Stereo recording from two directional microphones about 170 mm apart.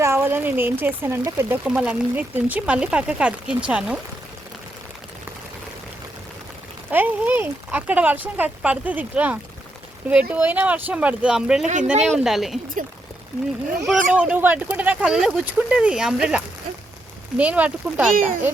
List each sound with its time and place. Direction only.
0.0 s speech: 15° right (ahead or behind)
6.9 s speech: 10° right (ahead or behind)
11.6 s speech: 45° right (ahead or behind)
12.0 s a woman's voice: centre (ahead or behind)
14.2 s speech: 10° right (ahead or behind)